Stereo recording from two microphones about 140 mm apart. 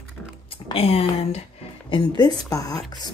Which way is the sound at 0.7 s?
45° left (ahead or behind).